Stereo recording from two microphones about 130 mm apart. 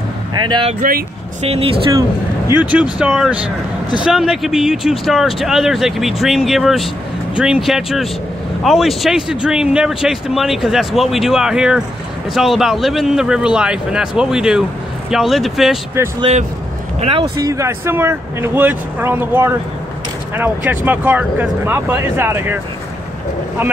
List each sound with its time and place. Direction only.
0.3 s speech: 35° right (ahead or behind)
1.4 s speech: 50° right (ahead or behind)
2.0 s speech: 20° right (ahead or behind); by 15.8 s centre (ahead or behind)
17.0 s speech: 45° right (ahead or behind)
17.4 s speech: 25° right (ahead or behind)